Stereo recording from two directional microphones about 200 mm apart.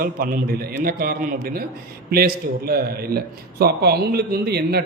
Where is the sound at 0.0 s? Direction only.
50° right (ahead or behind).